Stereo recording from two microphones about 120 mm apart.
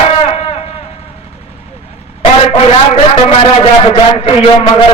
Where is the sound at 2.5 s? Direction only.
50° left (ahead or behind).